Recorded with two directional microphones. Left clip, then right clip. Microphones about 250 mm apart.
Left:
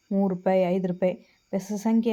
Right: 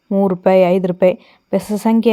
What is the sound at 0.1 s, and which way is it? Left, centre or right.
A woman's voice, right.